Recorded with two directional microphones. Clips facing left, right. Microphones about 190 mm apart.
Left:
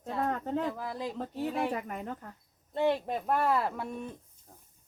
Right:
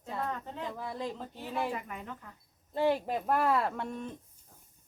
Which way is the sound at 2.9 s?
5° right (ahead or behind).